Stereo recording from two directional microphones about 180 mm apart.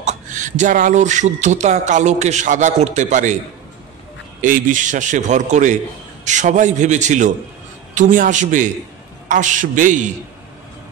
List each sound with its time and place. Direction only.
0.0 s speech: 45° right (ahead or behind)
4.4 s speech: 45° right (ahead or behind)